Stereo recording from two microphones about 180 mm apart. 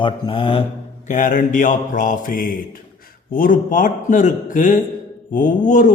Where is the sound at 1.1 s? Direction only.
45° left (ahead or behind).